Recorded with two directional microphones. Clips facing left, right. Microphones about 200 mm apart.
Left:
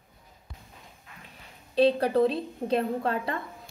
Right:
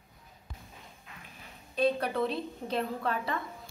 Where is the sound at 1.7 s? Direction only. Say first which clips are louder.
Left 7 dB; 30° left (ahead or behind).